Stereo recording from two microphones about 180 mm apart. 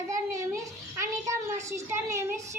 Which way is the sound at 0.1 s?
15° right (ahead or behind).